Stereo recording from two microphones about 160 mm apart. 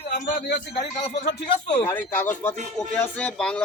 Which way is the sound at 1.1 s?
50° left (ahead or behind).